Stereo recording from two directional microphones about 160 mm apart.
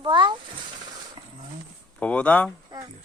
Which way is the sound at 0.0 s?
30° right (ahead or behind).